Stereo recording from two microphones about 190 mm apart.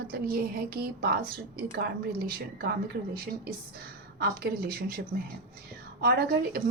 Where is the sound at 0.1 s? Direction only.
55° right (ahead or behind).